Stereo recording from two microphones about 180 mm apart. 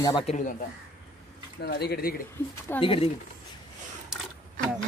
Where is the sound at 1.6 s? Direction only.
65° left (ahead or behind).